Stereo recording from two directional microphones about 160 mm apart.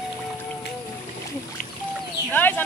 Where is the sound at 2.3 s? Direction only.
10° left (ahead or behind).